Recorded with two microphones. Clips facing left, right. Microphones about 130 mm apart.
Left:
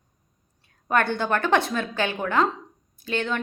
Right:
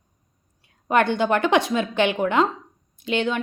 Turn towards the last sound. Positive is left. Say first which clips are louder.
# right 4 dB
turn(degrees=-15)  # may be behind; listen again after turning